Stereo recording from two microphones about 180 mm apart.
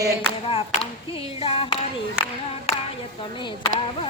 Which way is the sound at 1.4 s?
30° left (ahead or behind).